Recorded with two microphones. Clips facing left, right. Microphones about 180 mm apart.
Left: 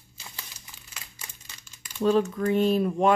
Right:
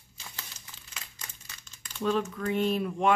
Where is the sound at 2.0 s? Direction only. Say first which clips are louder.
Left 6 dB; 35° left (ahead or behind).